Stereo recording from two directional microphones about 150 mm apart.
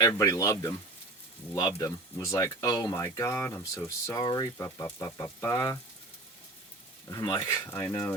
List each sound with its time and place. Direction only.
0.2 s speech: 20° left (ahead or behind)
7.1 s speech: 25° left (ahead or behind)
7.7 s cutlery: 15° left (ahead or behind)